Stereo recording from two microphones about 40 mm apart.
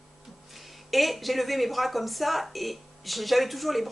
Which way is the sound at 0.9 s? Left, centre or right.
Centre.